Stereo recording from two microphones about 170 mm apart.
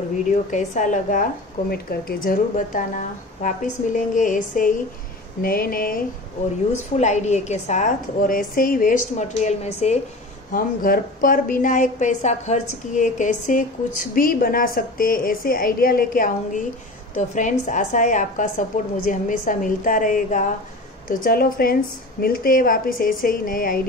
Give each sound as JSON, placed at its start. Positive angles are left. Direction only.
{"t": 0.3, "sound": "a woman's voice", "side_deg": 45}
{"t": 7.0, "sound": "a woman's voice", "side_deg": 45}
{"t": 10.5, "sound": "a woman's voice", "side_deg": 55}
{"t": 21.1, "sound": "a woman's voice", "side_deg": 60}